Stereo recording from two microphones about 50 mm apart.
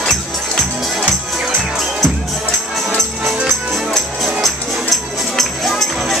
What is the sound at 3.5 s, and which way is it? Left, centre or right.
Music, centre.